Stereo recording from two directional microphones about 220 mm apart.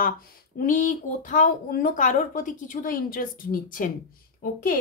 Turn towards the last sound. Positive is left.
turn(degrees=40)  # may be behind; listen again after turning